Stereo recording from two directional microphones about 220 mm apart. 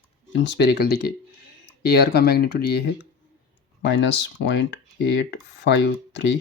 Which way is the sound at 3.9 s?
55° left (ahead or behind).